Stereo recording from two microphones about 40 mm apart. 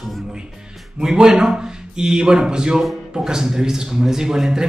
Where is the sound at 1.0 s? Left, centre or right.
Centre.